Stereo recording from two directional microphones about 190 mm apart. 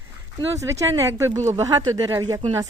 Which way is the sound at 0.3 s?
15° right (ahead or behind).